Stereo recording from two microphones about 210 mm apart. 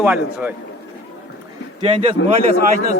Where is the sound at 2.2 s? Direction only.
60° left (ahead or behind).